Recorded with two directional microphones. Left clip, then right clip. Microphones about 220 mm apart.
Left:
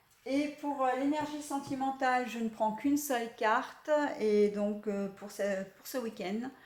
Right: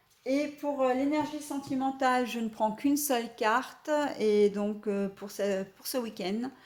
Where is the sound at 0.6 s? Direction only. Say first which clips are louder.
Right 3 dB; 45° right (ahead or behind).